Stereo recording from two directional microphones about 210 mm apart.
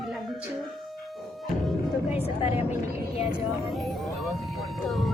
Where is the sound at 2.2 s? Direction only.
30° left (ahead or behind).